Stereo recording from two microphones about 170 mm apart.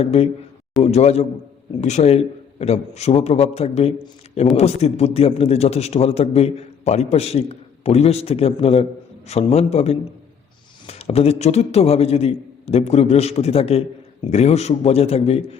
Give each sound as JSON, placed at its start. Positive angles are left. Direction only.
{"t": 0.0, "sound": "a man's voice", "side_deg": 35}